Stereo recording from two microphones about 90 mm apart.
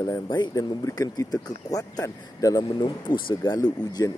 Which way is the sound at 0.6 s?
40° left (ahead or behind).